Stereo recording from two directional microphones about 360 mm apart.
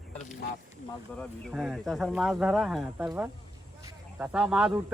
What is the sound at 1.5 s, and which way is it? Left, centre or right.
Speech, centre.